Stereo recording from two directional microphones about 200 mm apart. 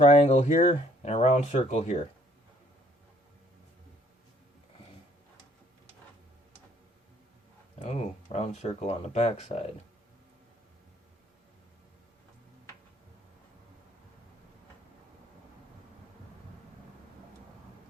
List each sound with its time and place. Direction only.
0.0 s speech: 30° left (ahead or behind)
7.8 s speech: 35° left (ahead or behind)